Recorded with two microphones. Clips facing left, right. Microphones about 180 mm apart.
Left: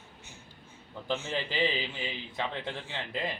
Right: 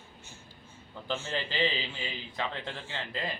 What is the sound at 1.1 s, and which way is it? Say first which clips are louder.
A man's voice: left 1 dB; 15° left (ahead or behind).